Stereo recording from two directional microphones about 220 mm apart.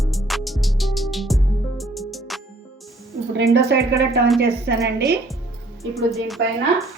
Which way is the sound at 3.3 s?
50° right (ahead or behind).